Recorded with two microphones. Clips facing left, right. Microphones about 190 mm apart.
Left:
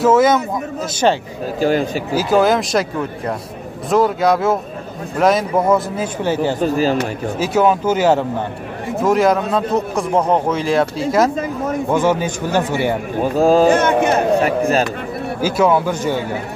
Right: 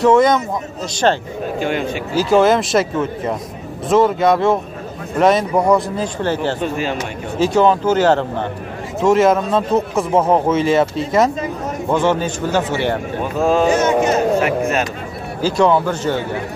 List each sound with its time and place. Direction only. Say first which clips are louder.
0.0 s speech: even; 5° left (ahead or behind)
1.6 s speech: left 5 dB; 35° left (ahead or behind)
2.2 s speech: right 2 dB; centre (ahead or behind)
6.6 s speech: left 5 dB; 35° left (ahead or behind)
7.3 s speech: right 2 dB; 5° left (ahead or behind)
11.9 s speech: right 1 dB; 10° left (ahead or behind)
13.2 s speech: left 4 dB; 35° left (ahead or behind)
13.7 s speech: left 1 dB; 55° left (ahead or behind)
14.4 s speech: left 2 dB; 35° left (ahead or behind)
15.4 s speech: right 1 dB; 5° left (ahead or behind)